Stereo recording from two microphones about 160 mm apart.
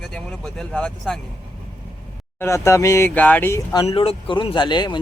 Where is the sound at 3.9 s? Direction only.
35° left (ahead or behind).